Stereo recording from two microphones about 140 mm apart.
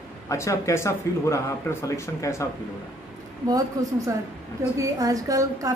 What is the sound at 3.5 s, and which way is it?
A woman's voice, 25° right (ahead or behind).